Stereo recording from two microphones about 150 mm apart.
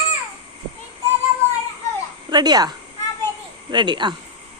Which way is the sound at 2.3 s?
30° right (ahead or behind).